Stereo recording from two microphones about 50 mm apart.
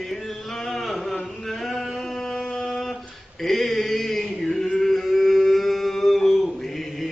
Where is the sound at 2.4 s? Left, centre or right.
Left.